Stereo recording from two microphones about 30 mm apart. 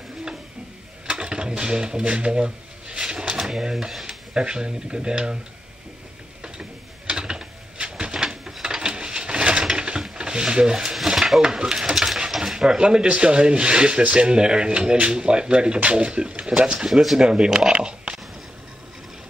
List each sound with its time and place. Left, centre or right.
1.0 s speech: right
3.0 s drawer open or close: right
3.3 s speech: centre
6.4 s typing: right
8.6 s a sound: right
9.6 s sewing machine: right
10.1 s speech: right
11.1 s a sound: centre
11.4 s speech: right
12.3 s a sound: centre
12.5 s speech: right
17.7 s a sound: right